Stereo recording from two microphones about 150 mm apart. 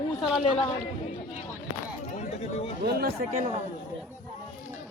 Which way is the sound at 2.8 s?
90° right.